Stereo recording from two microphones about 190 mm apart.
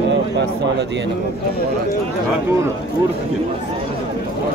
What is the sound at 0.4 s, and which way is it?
Speech, 70° right (ahead or behind).